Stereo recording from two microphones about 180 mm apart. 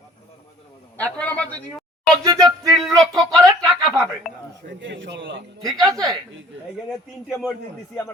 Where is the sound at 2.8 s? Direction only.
Centre (ahead or behind).